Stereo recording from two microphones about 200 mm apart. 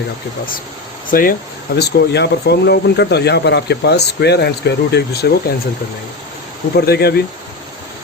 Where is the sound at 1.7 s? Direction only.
55° left (ahead or behind).